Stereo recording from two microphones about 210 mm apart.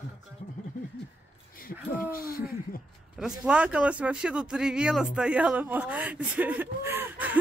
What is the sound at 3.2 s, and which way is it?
Speech, 5° right (ahead or behind).